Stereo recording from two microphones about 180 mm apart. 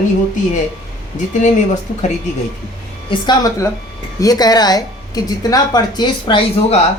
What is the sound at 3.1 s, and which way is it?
Speech, 25° left (ahead or behind).